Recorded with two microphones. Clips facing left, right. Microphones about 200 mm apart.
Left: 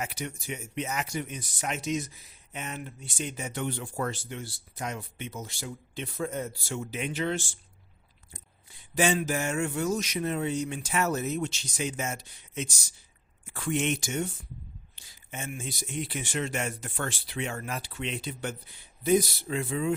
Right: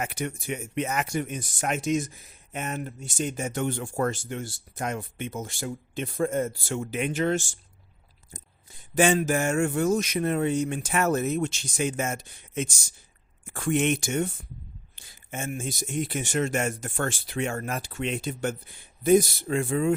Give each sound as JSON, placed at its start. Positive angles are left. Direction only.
{"t": 0.0, "sound": "speech", "side_deg": -55}
{"t": 9.0, "sound": "speech", "side_deg": -50}